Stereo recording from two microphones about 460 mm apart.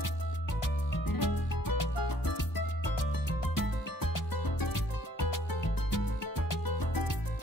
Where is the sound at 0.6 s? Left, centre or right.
Left.